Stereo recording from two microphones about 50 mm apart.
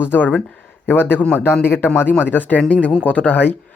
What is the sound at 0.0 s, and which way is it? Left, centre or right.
Speech, left.